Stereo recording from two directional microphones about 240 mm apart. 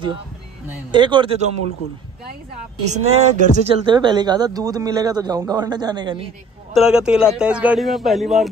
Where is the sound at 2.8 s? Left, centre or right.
Right.